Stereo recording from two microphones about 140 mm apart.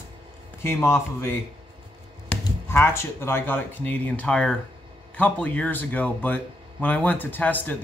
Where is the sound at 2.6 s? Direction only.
15° left (ahead or behind).